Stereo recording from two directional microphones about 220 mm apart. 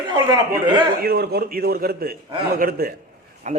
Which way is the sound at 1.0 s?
45° right (ahead or behind).